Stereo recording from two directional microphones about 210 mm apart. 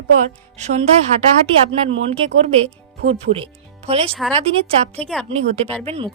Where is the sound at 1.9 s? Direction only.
30° right (ahead or behind).